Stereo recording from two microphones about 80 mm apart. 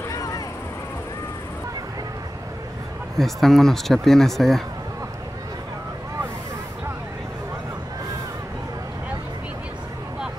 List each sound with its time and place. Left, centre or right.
0.1 s vehicle: left
3.2 s speech: centre